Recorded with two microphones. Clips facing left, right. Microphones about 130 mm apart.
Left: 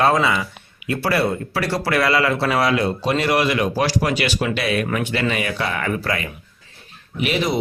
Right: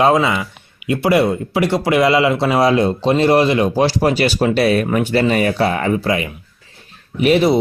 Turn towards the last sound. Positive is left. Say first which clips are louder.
# right 8 dB
turn(degrees=-35)  # may be behind; listen again after turning